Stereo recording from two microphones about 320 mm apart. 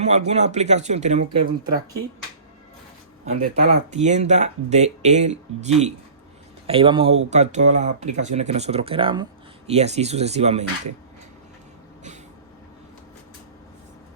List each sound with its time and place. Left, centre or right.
0.0 s speech: right
3.2 s speech: right